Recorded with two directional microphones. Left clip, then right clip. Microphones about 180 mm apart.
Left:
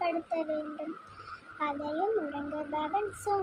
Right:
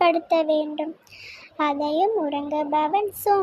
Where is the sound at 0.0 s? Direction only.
40° right (ahead or behind).